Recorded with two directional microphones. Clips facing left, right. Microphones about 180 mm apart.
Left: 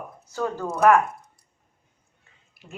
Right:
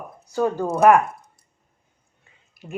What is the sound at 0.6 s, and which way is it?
Speech, 25° right (ahead or behind).